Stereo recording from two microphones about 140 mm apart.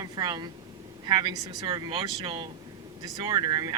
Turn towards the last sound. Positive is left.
turn(degrees=-30)  # may be behind; listen again after turning